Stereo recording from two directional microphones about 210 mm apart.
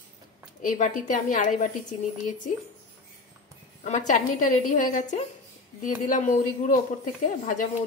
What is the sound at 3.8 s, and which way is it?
A woman's voice, 35° left (ahead or behind).